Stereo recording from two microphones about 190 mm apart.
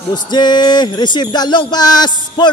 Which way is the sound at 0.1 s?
20° left (ahead or behind).